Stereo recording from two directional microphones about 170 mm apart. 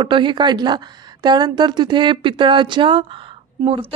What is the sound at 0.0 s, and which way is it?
A woman's voice, 30° right (ahead or behind).